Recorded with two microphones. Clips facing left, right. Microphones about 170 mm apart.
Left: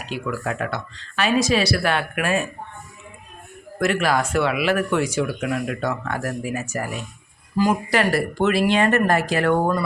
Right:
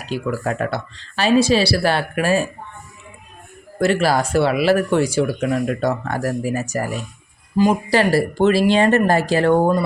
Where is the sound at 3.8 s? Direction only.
30° right (ahead or behind).